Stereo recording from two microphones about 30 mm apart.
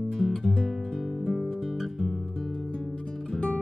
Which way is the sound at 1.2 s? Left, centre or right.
Centre.